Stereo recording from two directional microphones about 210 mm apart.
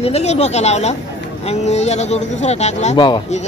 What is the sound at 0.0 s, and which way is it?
Speech, 30° left (ahead or behind).